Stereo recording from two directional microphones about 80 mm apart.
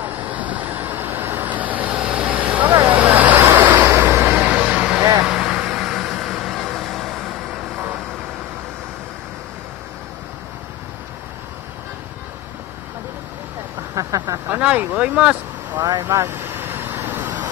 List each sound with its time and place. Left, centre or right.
0.0 s vehicle: right; by 7.6 s centre
13.9 s a sound: right
14.5 s speech: centre
15.8 s speech: right
16.3 s vehicle: right